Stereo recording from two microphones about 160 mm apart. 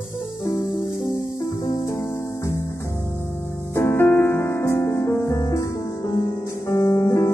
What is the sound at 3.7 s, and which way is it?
Music, 15° left (ahead or behind).